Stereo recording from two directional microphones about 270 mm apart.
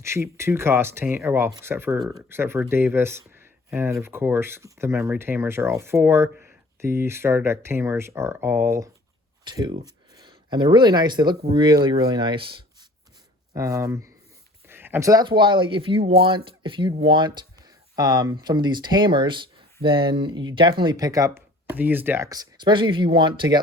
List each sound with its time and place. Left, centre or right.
0.0 s speech: centre